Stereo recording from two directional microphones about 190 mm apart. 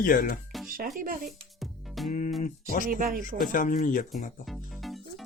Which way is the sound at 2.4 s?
45° left (ahead or behind).